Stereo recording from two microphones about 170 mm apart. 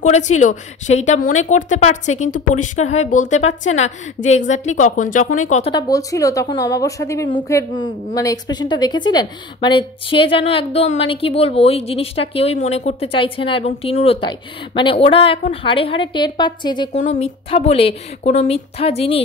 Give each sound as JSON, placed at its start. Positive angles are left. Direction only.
{"t": 0.0, "sound": "a woman's voice", "side_deg": 45}
{"t": 5.7, "sound": "a woman's voice", "side_deg": 20}
{"t": 16.9, "sound": "speech", "side_deg": 45}